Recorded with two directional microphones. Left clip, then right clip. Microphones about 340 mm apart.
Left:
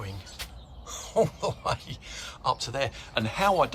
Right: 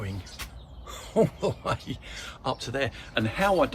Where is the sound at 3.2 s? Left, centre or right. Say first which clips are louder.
Even; centre.